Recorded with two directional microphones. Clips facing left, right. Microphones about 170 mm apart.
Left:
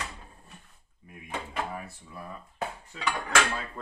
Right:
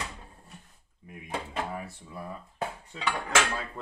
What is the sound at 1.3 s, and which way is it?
Drawer open or close, 25° right (ahead or behind).